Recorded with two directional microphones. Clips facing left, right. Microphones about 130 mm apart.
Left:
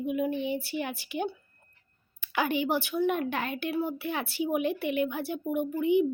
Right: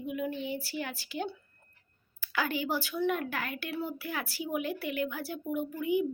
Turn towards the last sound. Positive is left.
turn(degrees=25)  # may be behind; listen again after turning